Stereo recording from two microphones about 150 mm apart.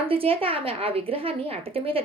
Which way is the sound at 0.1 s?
40° right (ahead or behind).